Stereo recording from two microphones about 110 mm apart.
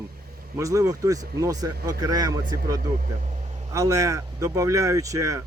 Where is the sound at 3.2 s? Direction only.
90° right.